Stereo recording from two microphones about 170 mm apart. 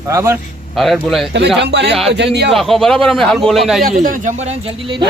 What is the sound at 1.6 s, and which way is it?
Speech, 85° right.